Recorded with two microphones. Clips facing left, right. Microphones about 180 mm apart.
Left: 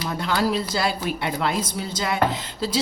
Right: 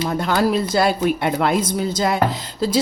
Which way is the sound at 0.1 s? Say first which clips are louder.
Right 3 dB; 45° right (ahead or behind).